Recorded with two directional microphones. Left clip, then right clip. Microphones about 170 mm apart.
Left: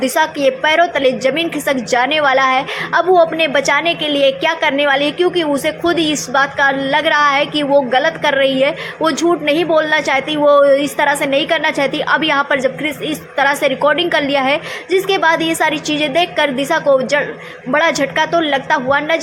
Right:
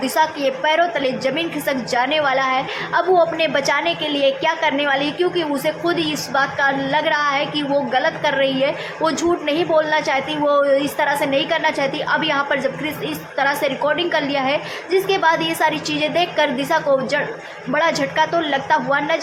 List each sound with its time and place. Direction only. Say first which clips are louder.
0.0 s a woman's voice: left 4 dB; 25° left (ahead or behind)